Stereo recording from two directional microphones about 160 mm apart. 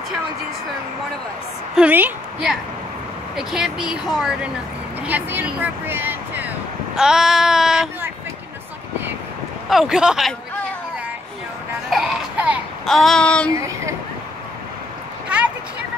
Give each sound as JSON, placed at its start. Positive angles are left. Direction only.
{"t": 1.8, "sound": "a woman's voice", "side_deg": -10}
{"t": 3.3, "sound": "child singing", "side_deg": -5}
{"t": 5.0, "sound": "speech", "side_deg": -10}
{"t": 7.0, "sound": "child singing", "side_deg": -5}
{"t": 9.7, "sound": "child singing", "side_deg": -5}
{"t": 11.9, "sound": "music", "side_deg": -5}
{"t": 12.8, "sound": "child singing", "side_deg": 0}
{"t": 13.5, "sound": "speech", "side_deg": -20}
{"t": 15.2, "sound": "a sound", "side_deg": -10}